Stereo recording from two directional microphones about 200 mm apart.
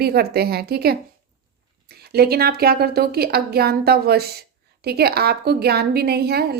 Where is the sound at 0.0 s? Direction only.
50° right (ahead or behind).